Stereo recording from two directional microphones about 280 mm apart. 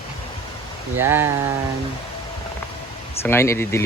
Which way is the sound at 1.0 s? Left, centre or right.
Centre.